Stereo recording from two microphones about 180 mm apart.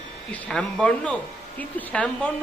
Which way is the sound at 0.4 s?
5° left (ahead or behind).